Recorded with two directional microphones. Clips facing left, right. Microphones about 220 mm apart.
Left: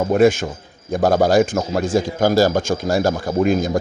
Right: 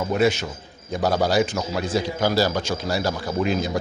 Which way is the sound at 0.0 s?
50° left (ahead or behind).